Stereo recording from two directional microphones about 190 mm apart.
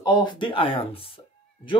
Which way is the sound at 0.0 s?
20° left (ahead or behind).